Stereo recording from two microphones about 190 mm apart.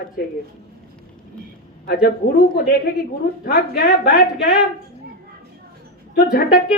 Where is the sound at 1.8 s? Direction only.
55° left (ahead or behind).